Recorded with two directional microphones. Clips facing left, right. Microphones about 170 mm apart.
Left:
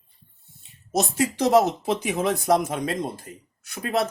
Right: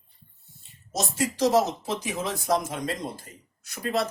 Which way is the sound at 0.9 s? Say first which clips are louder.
Left 3 dB; 60° left (ahead or behind).